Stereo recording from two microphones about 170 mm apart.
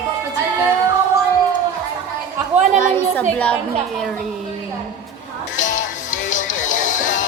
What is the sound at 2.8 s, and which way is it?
A woman's voice, 10° left (ahead or behind).